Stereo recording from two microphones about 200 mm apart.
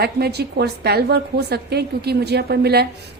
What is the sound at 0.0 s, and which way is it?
A woman's voice, 55° right (ahead or behind).